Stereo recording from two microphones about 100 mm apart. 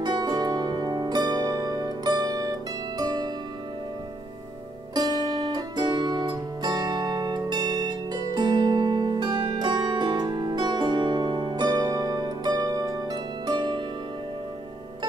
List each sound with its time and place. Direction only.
0.0 s zither: 45° right (ahead or behind)
5.3 s music: 45° right (ahead or behind)